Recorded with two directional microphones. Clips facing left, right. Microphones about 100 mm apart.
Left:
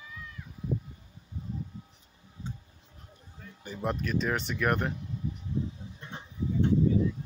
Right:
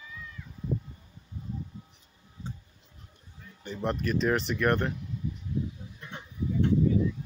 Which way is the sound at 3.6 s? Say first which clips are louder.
Right 2 dB; 5° left (ahead or behind).